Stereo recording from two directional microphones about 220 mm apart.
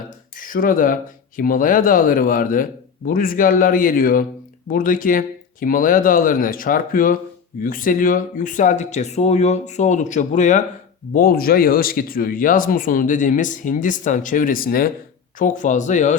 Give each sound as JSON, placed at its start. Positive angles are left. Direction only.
{"t": 0.3, "sound": "speech", "side_deg": 40}